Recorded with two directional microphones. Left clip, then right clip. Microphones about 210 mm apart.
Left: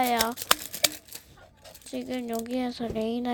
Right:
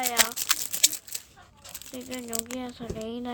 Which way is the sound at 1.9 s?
25° left (ahead or behind).